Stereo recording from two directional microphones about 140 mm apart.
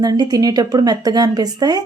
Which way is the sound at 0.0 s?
25° right (ahead or behind).